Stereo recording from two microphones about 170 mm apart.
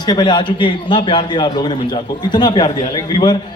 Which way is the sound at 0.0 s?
25° left (ahead or behind).